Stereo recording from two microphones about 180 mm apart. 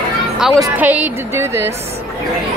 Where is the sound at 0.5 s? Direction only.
10° right (ahead or behind).